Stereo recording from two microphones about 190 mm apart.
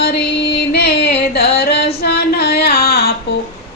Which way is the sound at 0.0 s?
60° left (ahead or behind).